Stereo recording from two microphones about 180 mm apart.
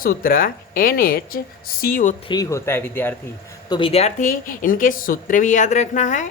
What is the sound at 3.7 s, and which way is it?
Speech, 30° left (ahead or behind).